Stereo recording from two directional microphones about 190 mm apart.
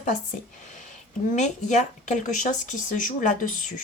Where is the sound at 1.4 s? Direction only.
40° left (ahead or behind).